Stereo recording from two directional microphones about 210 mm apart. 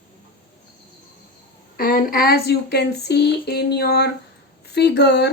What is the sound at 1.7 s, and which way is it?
Speech, 40° left (ahead or behind).